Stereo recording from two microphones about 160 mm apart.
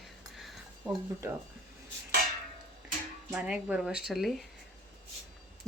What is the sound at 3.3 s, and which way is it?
A woman's voice, 5° right (ahead or behind).